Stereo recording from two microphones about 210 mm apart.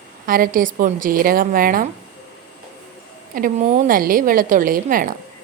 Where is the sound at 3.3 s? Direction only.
40° right (ahead or behind).